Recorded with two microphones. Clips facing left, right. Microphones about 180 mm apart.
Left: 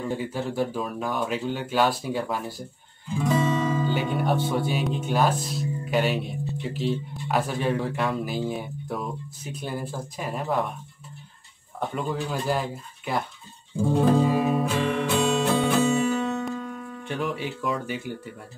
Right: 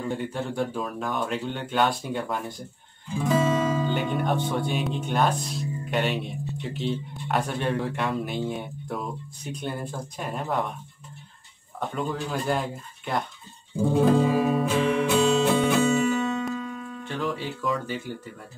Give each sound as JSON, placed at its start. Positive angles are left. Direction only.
{"t": 0.0, "sound": "speech", "side_deg": 0}
{"t": 11.9, "sound": "speech", "side_deg": 0}
{"t": 13.7, "sound": "music", "side_deg": 0}
{"t": 17.2, "sound": "speech", "side_deg": 20}